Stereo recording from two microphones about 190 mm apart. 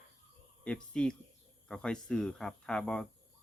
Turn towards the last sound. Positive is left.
turn(degrees=5)  # may be behind; listen again after turning